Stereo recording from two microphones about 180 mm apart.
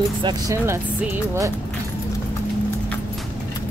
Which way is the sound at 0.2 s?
20° right (ahead or behind).